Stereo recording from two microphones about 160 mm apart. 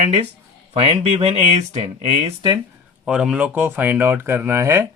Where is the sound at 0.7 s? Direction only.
40° right (ahead or behind).